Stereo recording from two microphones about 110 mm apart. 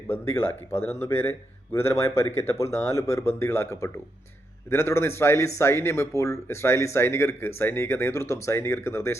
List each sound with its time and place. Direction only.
0.1 s speech: 25° left (ahead or behind)